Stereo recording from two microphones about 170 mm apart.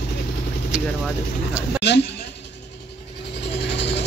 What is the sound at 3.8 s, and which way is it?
Ratchet, 90° left.